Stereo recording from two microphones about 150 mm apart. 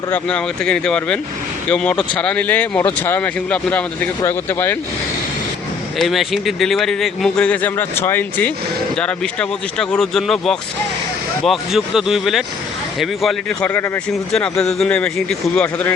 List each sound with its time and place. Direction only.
0.1 s speech: 5° left (ahead or behind)
6.0 s a man's voice: centre (ahead or behind)
14.3 s a man's voice: 5° left (ahead or behind)